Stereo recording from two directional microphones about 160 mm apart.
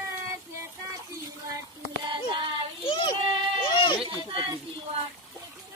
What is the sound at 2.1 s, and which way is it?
Child singing, 30° right (ahead or behind).